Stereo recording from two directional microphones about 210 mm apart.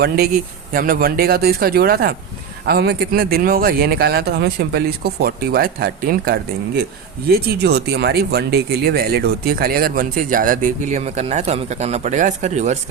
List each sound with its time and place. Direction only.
0.7 s speech: 45° right (ahead or behind)